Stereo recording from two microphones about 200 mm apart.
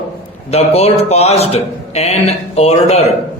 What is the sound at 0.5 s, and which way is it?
A man's voice, 30° left (ahead or behind).